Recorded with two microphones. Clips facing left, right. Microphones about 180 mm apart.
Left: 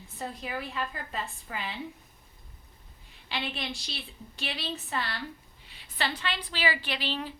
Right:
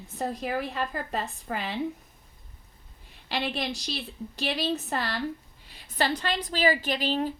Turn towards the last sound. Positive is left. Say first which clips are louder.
# right 7 dB
turn(degrees=-45)  # may be behind; listen again after turning